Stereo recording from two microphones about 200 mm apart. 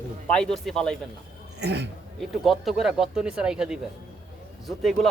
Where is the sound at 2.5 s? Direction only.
Centre (ahead or behind).